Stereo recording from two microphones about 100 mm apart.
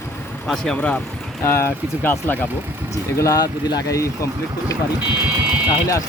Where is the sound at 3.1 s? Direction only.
35° left (ahead or behind).